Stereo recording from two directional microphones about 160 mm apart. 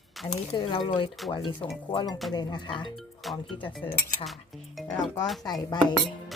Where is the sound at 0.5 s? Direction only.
30° left (ahead or behind).